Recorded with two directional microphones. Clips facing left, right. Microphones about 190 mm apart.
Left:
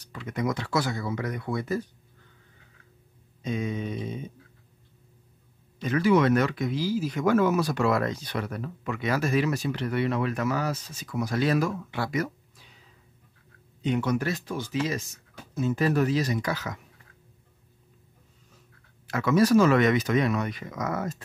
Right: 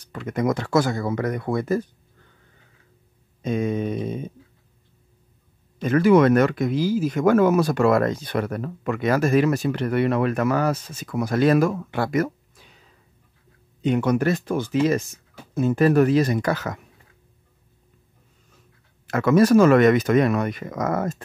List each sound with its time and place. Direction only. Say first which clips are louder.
0.0 s speech: right 6 dB; 50° right (ahead or behind)
3.4 s speech: right 7 dB; 50° right (ahead or behind)
5.8 s speech: right 6 dB; 50° right (ahead or behind)
13.8 s speech: right 6 dB; 55° right (ahead or behind)
19.0 s speech: right 5 dB; 55° right (ahead or behind)